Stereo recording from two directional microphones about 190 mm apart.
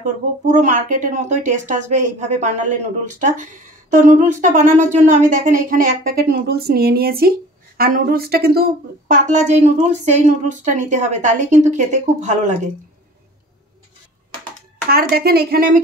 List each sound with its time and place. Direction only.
0.0 s speech: 40° right (ahead or behind)
14.9 s speech: 55° right (ahead or behind)